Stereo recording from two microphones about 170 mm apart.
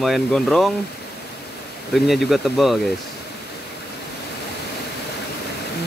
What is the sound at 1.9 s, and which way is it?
Speech, centre (ahead or behind).